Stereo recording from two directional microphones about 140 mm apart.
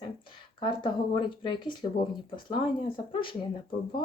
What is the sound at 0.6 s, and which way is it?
Speech, 35° left (ahead or behind).